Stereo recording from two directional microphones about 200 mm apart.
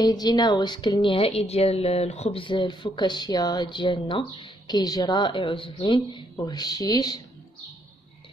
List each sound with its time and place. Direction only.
0.0 s a woman's voice: 20° left (ahead or behind)